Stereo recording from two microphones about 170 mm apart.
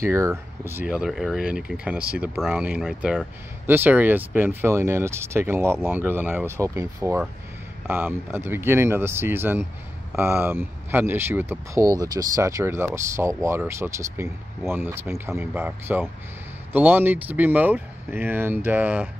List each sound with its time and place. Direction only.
0.0 s speech: 15° right (ahead or behind)